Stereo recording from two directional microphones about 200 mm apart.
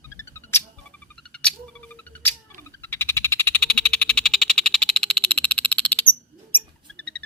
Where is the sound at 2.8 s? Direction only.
10° left (ahead or behind).